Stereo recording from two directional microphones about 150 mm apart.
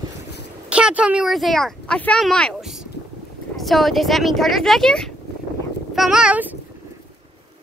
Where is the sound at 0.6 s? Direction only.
10° right (ahead or behind).